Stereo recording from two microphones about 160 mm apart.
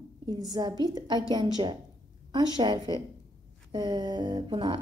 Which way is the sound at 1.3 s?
30° right (ahead or behind).